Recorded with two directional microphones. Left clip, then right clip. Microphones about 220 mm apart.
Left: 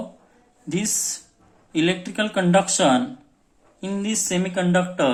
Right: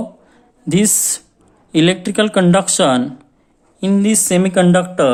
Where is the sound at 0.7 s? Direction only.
45° right (ahead or behind).